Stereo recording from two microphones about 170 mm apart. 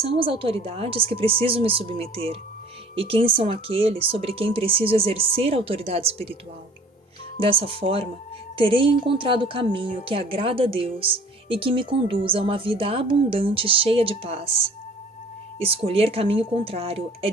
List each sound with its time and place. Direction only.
0.1 s a woman's voice: 35° right (ahead or behind)
7.3 s a woman's voice: 30° right (ahead or behind)